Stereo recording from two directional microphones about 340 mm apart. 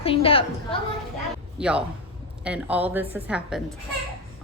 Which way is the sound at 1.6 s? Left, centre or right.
Centre.